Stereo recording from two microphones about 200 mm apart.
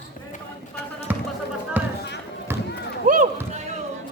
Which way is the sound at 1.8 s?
10° right (ahead or behind).